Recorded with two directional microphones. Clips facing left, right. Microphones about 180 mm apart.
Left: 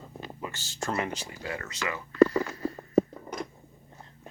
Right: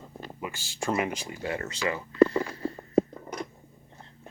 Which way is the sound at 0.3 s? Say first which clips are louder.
Right 2 dB; 15° right (ahead or behind).